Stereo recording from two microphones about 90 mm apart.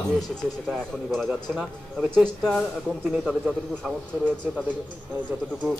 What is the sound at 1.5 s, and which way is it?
Speech, 5° right (ahead or behind).